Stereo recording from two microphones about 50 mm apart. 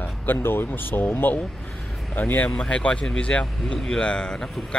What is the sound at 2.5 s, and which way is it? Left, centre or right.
Speech, centre.